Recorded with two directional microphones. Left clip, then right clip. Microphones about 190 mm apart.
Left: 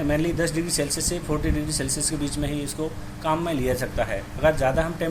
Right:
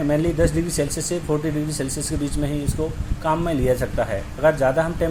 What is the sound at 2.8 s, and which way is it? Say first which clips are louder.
Speech: right 4 dB; 35° right (ahead or behind).